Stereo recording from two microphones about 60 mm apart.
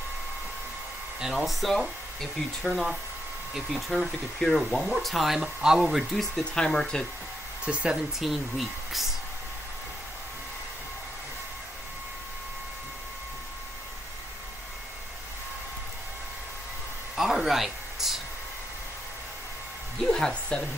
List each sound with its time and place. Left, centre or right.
1.2 s speech: centre
2.6 s speech: centre
4.4 s speech: centre
6.3 s speech: centre
7.6 s speech: centre
8.2 s speech: centre
17.1 s a sound: centre
20.1 s music: centre